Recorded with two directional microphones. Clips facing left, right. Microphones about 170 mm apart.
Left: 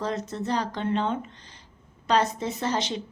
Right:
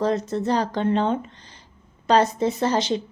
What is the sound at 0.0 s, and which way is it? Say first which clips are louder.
A woman's voice: right 7 dB; 35° right (ahead or behind).